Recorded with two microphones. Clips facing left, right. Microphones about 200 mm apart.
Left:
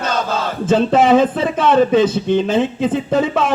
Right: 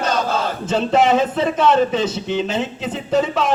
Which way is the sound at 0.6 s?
50° left (ahead or behind).